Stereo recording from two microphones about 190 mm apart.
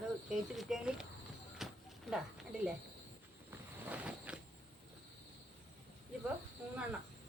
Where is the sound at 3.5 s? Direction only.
10° right (ahead or behind).